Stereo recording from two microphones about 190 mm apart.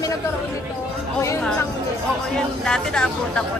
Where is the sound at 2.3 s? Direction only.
5° left (ahead or behind).